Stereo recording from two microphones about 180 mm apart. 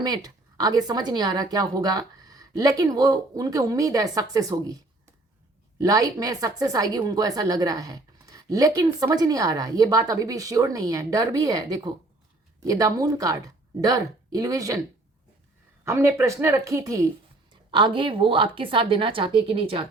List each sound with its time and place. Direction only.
0.0 s a woman's voice: 20° right (ahead or behind)
5.8 s a woman's voice: 20° right (ahead or behind)
15.8 s a woman's voice: 15° right (ahead or behind)